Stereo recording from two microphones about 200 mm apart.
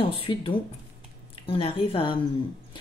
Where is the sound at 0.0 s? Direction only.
25° left (ahead or behind).